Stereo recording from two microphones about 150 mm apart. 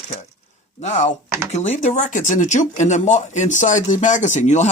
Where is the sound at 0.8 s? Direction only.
50° left (ahead or behind).